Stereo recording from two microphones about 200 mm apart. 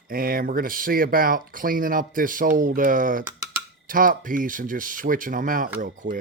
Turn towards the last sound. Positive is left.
turn(degrees=-40)  # may be behind; listen again after turning